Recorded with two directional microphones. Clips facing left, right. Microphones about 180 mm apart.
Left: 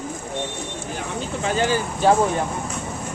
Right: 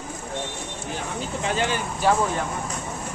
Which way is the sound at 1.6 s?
35° left (ahead or behind).